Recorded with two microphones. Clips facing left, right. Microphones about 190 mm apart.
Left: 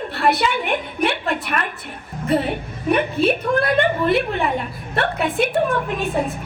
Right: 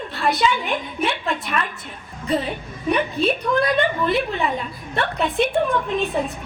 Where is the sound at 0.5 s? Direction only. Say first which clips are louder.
Left 2 dB; 60° left (ahead or behind).